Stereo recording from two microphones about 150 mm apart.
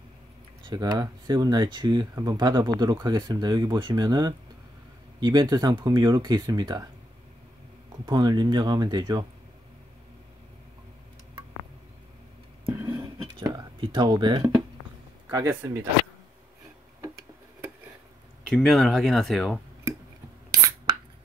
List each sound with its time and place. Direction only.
0.7 s speech: 25° right (ahead or behind)
8.0 s speech: 25° right (ahead or behind)
12.6 s whispering: 20° right (ahead or behind)
13.8 s speech: 30° right (ahead or behind)
15.2 s speech: 20° right (ahead or behind)
18.5 s speech: centre (ahead or behind)